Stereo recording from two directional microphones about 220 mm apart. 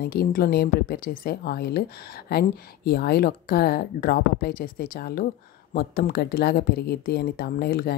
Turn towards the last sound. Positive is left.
turn(degrees=45)  # may be behind; listen again after turning